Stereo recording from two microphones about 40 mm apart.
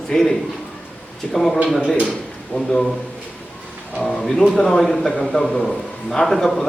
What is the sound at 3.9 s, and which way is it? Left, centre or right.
A man's voice, centre.